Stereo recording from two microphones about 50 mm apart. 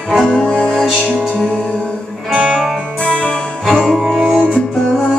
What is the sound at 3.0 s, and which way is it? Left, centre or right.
Music, left.